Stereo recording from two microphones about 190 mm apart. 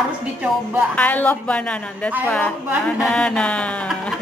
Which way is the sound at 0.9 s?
10° left (ahead or behind).